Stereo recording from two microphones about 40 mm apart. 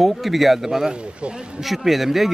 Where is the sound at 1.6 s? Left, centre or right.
Centre.